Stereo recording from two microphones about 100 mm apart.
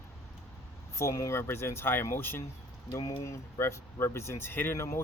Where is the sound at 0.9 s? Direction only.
30° left (ahead or behind).